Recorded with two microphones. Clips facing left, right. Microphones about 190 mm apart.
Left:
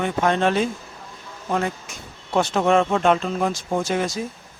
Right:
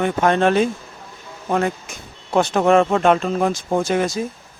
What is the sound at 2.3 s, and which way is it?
Speech, 55° right (ahead or behind).